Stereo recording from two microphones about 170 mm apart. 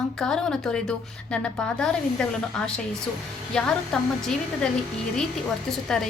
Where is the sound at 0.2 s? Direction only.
5° left (ahead or behind).